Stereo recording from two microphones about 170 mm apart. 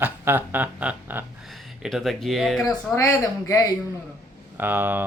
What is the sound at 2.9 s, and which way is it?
Speech, 20° left (ahead or behind).